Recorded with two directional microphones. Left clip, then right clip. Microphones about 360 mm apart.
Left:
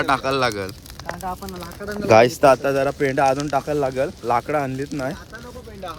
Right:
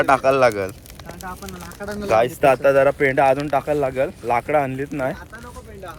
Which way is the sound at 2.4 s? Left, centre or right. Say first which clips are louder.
Right 1 dB; centre.